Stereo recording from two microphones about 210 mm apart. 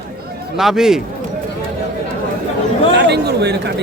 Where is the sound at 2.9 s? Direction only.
55° right (ahead or behind).